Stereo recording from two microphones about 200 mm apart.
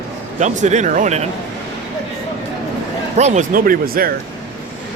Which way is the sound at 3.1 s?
35° right (ahead or behind).